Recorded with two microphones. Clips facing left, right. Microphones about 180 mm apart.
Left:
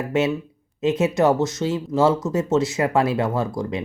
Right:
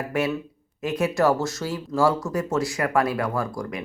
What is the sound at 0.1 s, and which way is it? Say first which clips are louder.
Speech: left 5 dB; 25° left (ahead or behind).